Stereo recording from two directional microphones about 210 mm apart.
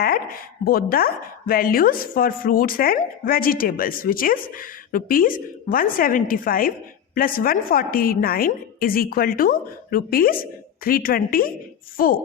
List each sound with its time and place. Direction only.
0.0 s chopping: 45° left (ahead or behind)